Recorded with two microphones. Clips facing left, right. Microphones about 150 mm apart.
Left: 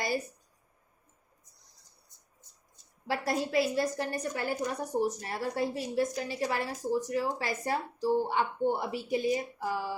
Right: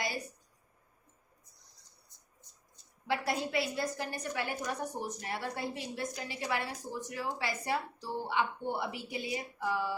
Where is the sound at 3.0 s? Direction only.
40° left (ahead or behind).